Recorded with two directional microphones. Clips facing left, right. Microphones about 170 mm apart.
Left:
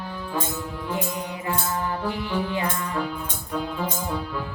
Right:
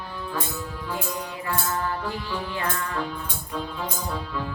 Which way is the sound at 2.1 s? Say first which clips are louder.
Left 4 dB; 20° left (ahead or behind).